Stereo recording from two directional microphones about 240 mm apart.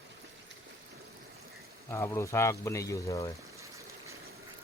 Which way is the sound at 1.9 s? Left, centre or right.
Centre.